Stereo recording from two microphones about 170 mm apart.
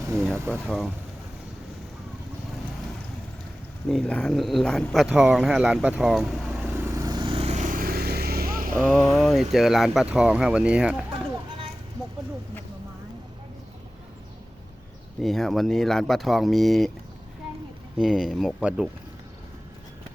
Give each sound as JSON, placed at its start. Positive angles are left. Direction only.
{"t": 0.1, "sound": "vehicle", "side_deg": 0}
{"t": 0.3, "sound": "speech", "side_deg": -15}
{"t": 3.8, "sound": "speech", "side_deg": 5}
{"t": 6.7, "sound": "vehicle", "side_deg": -15}
{"t": 8.9, "sound": "speech", "side_deg": 0}
{"t": 15.2, "sound": "speech", "side_deg": 0}
{"t": 17.9, "sound": "speech", "side_deg": -5}